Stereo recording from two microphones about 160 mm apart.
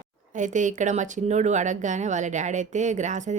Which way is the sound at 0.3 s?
50° right (ahead or behind).